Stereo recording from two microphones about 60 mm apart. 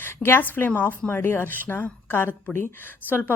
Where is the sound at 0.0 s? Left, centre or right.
Left.